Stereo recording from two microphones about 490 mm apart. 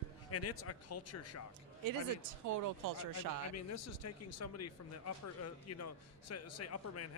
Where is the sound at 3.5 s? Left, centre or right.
Left.